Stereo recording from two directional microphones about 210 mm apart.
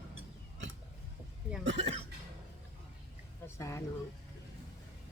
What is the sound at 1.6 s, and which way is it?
Speech, 60° right (ahead or behind).